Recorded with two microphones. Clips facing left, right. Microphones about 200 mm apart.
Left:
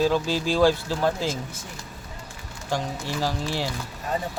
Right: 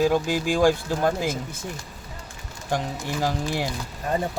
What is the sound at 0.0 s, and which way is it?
Speech, 15° right (ahead or behind).